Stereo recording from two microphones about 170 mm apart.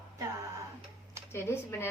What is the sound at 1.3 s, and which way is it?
Speech, 15° left (ahead or behind).